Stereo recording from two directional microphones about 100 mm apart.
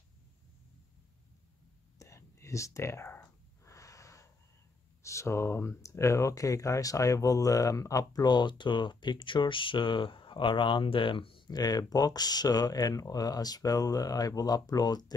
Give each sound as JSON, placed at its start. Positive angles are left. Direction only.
{"t": 2.0, "sound": "whispering", "side_deg": 30}
{"t": 3.6, "sound": "wheeze", "side_deg": 30}
{"t": 5.0, "sound": "speech", "side_deg": 30}